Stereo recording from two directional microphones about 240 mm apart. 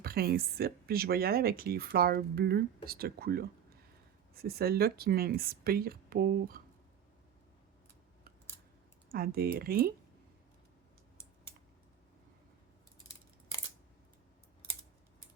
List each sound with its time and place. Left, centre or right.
0.0 s speech: right
9.1 s speech: right